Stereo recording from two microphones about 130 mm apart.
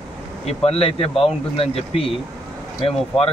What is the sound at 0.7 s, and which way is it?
Speech, 50° left (ahead or behind).